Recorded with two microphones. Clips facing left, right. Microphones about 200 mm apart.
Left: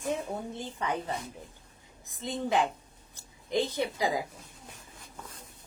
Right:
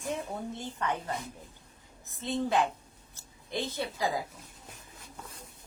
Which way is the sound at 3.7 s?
15° left (ahead or behind).